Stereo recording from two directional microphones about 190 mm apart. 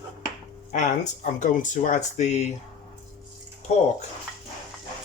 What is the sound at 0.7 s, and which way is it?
Speech, 40° left (ahead or behind).